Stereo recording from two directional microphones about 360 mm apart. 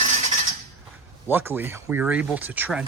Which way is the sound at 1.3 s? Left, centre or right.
Centre.